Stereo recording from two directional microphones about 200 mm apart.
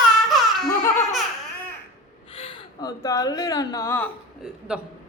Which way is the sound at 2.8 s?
15° left (ahead or behind).